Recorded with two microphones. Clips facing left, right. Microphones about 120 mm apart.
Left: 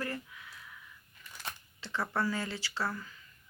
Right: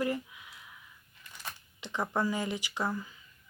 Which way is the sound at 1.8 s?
15° right (ahead or behind).